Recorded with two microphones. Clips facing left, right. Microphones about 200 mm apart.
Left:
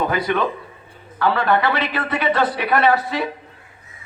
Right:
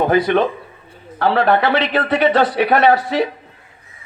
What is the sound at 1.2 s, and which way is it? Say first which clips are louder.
A man's voice: right 3 dB; 65° right (ahead or behind).